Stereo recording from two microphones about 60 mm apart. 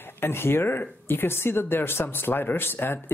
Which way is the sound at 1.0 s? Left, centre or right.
Left.